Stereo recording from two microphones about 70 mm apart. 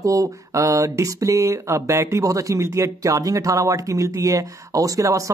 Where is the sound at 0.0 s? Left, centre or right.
Right.